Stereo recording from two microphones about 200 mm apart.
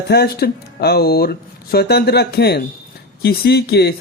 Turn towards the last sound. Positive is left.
turn(degrees=55)  # may be behind; listen again after turning